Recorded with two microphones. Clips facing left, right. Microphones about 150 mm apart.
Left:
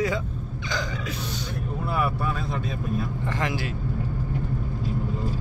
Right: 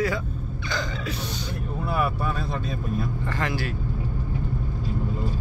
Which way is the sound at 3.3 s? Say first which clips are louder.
Even; 20° left (ahead or behind).